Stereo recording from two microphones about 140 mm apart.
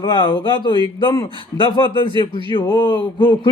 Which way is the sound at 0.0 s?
35° left (ahead or behind).